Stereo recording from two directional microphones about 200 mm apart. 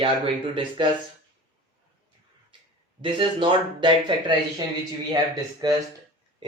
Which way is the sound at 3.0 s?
25° right (ahead or behind).